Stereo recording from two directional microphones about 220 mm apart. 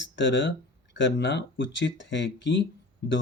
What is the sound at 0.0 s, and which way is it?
Speech, 55° left (ahead or behind).